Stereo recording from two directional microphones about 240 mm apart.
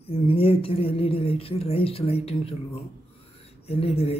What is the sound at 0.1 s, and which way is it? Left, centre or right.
A woman's voice, left.